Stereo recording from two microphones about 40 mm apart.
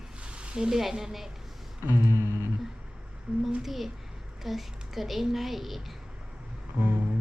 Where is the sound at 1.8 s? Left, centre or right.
Right.